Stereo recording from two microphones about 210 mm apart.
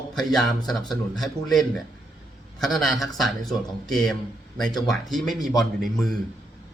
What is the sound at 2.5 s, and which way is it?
A man's voice, centre (ahead or behind).